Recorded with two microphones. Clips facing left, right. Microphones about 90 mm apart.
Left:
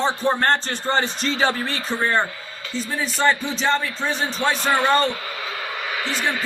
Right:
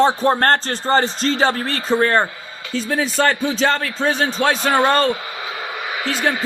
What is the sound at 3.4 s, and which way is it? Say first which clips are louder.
Speech: right 3 dB; 75° right (ahead or behind).